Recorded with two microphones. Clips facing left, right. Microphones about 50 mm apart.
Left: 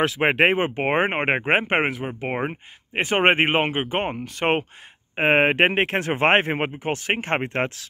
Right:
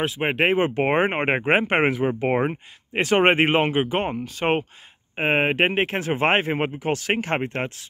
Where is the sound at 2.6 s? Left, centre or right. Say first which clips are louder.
Right 1 dB; left.